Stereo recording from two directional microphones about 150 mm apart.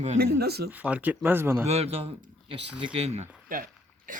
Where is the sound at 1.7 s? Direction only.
45° right (ahead or behind).